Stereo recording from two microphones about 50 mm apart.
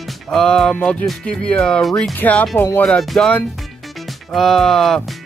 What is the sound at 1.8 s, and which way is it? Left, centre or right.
Speech, centre.